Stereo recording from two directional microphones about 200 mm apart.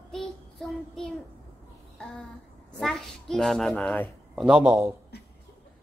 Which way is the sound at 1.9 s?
Centre (ahead or behind).